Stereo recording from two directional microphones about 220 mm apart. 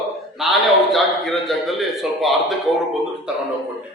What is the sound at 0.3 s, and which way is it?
A man's voice, centre (ahead or behind).